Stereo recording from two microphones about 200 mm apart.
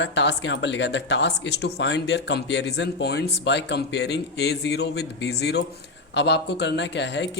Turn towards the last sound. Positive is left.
turn(degrees=60)  # may be behind; listen again after turning